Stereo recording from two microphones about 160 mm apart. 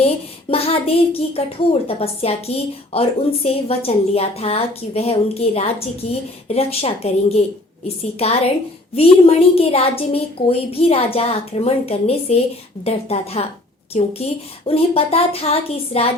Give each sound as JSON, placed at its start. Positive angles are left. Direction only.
{"t": 0.5, "sound": "a woman's voice", "side_deg": 40}